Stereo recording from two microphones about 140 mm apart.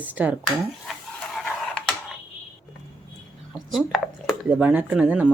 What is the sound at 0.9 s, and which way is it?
Pant, centre (ahead or behind).